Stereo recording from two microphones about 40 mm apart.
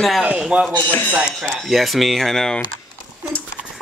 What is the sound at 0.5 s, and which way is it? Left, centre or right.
Speech, right.